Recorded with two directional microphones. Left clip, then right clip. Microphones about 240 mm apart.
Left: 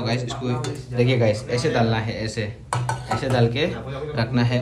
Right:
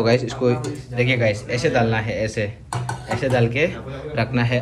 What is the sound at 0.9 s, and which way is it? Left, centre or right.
Speech, centre.